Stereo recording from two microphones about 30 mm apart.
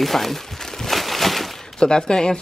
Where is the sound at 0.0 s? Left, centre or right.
Centre.